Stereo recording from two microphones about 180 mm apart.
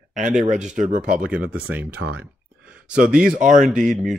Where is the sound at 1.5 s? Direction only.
10° right (ahead or behind).